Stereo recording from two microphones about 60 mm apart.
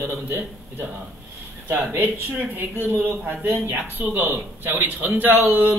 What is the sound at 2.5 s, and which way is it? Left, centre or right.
A man's voice, right.